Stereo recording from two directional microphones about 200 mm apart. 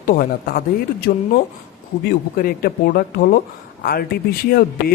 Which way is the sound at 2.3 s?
50° left (ahead or behind).